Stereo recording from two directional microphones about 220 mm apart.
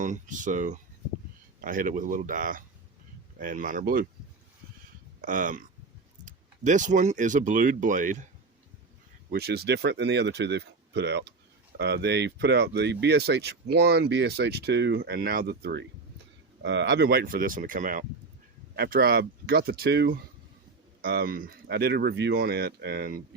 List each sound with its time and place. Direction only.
0.0 s speech: 35° right (ahead or behind)
5.2 s speech: 40° right (ahead or behind)
9.3 s speech: 45° right (ahead or behind)